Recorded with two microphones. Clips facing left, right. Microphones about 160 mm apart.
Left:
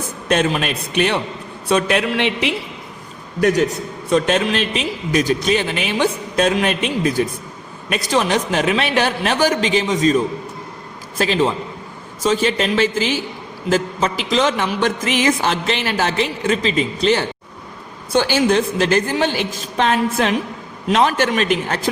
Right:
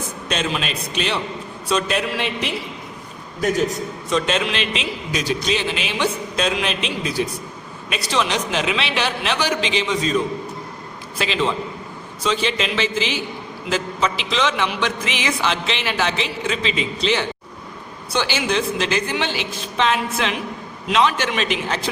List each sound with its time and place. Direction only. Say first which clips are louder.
0.3 s a man's voice: left 7 dB; 55° left (ahead or behind); by 2.5 s 70° left (ahead or behind)
4.1 s a man's voice: left 5 dB; 50° left (ahead or behind)
11.2 s a man's voice: left 4 dB; 45° left (ahead or behind)